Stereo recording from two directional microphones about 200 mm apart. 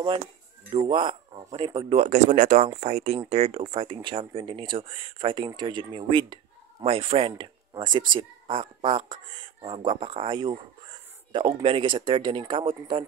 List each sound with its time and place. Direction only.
0.7 s speech: 25° right (ahead or behind)